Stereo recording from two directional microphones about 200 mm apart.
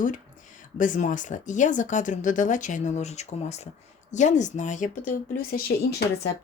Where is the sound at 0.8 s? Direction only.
40° left (ahead or behind).